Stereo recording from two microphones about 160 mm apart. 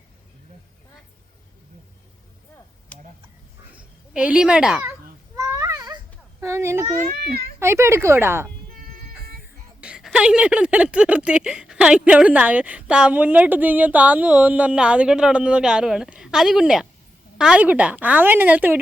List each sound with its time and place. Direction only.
3.8 s a child's voice: 10° right (ahead or behind)
5.4 s babbling: 20° right (ahead or behind)
6.4 s a sound: 15° right (ahead or behind)
7.6 s speech: 15° right (ahead or behind)
9.0 s music: 65° right (ahead or behind)
9.8 s speech: 5° right (ahead or behind)